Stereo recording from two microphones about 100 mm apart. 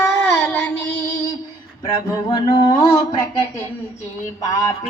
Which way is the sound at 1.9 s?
40° left (ahead or behind).